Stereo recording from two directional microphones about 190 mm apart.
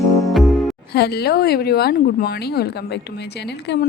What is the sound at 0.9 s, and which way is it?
Speech, 60° left (ahead or behind).